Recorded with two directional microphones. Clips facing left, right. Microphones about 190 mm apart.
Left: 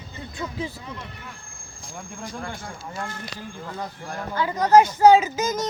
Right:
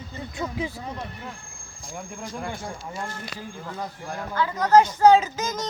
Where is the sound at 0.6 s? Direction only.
15° right (ahead or behind).